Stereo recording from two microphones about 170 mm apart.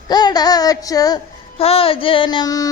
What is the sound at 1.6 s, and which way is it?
Speech, 35° left (ahead or behind).